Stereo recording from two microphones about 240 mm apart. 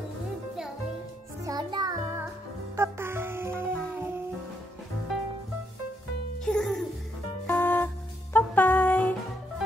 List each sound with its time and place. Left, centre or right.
1.4 s music: centre
6.4 s music: centre